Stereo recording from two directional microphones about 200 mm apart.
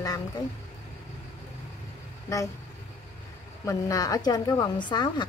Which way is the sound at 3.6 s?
15° left (ahead or behind).